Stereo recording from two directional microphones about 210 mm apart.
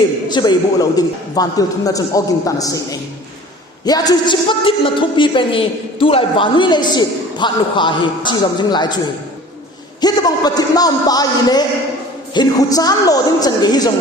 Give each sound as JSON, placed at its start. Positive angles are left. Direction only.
{"t": 0.3, "sound": "a man's voice", "side_deg": 20}
{"t": 10.0, "sound": "a man's voice", "side_deg": 20}